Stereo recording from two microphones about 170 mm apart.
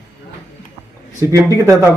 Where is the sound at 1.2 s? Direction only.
20° right (ahead or behind).